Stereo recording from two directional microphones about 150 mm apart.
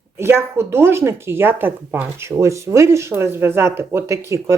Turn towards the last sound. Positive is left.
turn(degrees=-20)  # may be behind; listen again after turning